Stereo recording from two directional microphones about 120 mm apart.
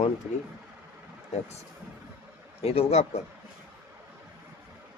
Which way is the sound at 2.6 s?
55° left (ahead or behind).